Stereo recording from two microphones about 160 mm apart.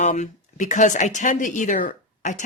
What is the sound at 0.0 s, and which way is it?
Speech, 45° left (ahead or behind).